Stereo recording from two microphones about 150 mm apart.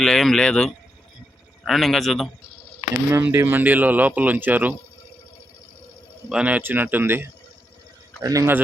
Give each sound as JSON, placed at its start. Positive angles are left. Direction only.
{"t": 0.0, "sound": "speech", "side_deg": 5}
{"t": 3.1, "sound": "speech", "side_deg": -15}
{"t": 6.2, "sound": "speech", "side_deg": -10}